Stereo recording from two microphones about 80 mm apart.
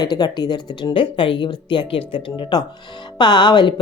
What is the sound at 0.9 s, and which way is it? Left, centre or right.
Speech, left.